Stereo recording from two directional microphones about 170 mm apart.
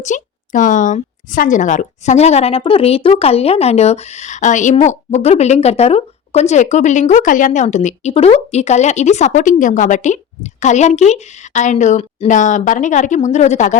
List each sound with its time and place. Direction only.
0.0 s speech: 45° left (ahead or behind)